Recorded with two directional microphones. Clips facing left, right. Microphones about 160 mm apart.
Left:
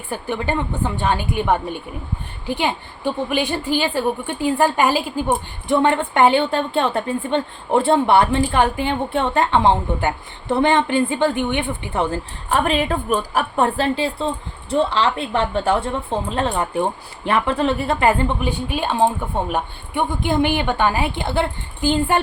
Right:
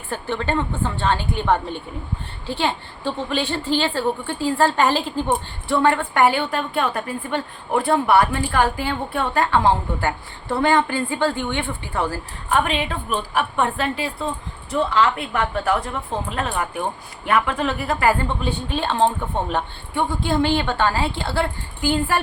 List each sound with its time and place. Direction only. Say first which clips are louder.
0.1 s a woman's voice: left 1 dB; 15° left (ahead or behind)
5.6 s a woman's voice: left 2 dB; 20° left (ahead or behind)
12.5 s a woman's voice: left 2 dB; 40° left (ahead or behind); by 22.2 s 20° left (ahead or behind)